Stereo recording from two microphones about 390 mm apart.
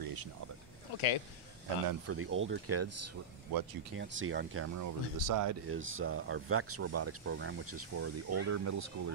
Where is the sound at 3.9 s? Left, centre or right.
Right.